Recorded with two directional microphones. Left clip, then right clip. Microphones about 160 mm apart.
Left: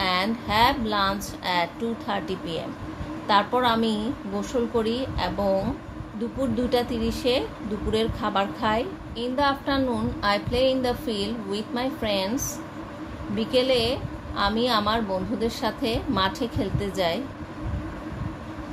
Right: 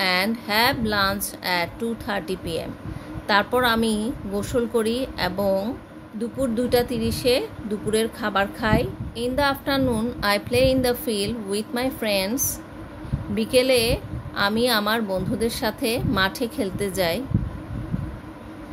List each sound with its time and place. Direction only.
0.0 s a woman's voice: 40° right (ahead or behind)